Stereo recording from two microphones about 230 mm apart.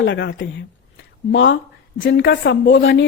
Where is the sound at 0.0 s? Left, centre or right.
Left.